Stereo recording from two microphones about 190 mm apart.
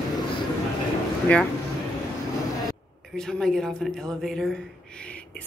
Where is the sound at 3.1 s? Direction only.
5° left (ahead or behind).